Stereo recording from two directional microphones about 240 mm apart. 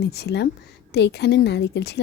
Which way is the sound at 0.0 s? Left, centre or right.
Left.